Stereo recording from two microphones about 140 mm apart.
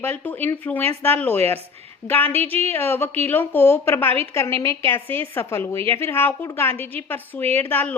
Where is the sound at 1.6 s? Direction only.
45° right (ahead or behind).